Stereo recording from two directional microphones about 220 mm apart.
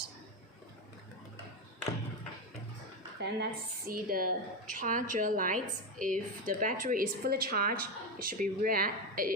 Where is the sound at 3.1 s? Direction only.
50° right (ahead or behind).